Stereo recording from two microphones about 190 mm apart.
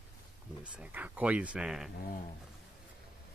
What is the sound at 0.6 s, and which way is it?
Speech, 5° right (ahead or behind).